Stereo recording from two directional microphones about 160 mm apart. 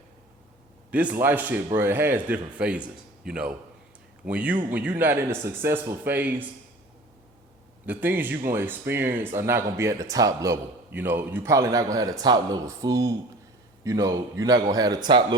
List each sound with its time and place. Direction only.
0.9 s a man's voice: 10° right (ahead or behind)
7.9 s a man's voice: 10° right (ahead or behind); by 15.4 s 25° right (ahead or behind)